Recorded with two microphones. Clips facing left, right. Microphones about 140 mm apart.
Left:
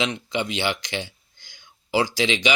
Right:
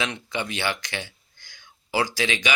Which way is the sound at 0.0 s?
20° left (ahead or behind).